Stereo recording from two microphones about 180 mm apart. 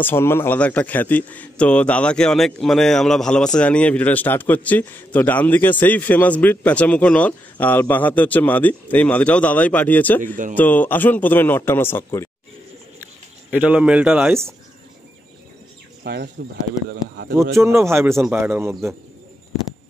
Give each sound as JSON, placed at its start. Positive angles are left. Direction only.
{"t": 0.0, "sound": "a man's voice", "side_deg": 15}
{"t": 10.2, "sound": "speech", "side_deg": -45}
{"t": 10.5, "sound": "a man's voice", "side_deg": 10}
{"t": 13.5, "sound": "a man's voice", "side_deg": -5}
{"t": 16.0, "sound": "speech", "side_deg": -65}
{"t": 17.6, "sound": "a man's voice", "side_deg": -15}